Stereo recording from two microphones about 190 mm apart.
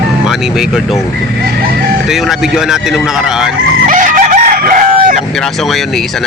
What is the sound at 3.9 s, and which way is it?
Chicken, 45° right (ahead or behind).